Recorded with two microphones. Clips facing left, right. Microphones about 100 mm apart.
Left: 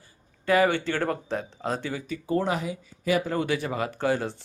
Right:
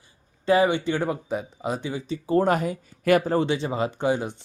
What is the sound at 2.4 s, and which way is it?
Speech, 50° right (ahead or behind).